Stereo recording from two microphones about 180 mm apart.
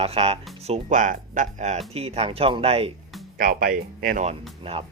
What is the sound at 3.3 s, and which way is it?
Speech, 55° right (ahead or behind).